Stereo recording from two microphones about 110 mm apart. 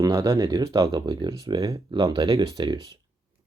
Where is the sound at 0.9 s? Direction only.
40° right (ahead or behind).